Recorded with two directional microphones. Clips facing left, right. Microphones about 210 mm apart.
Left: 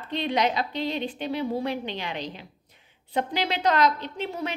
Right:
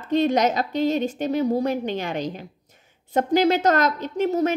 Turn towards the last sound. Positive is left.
turn(degrees=-45)  # may be behind; listen again after turning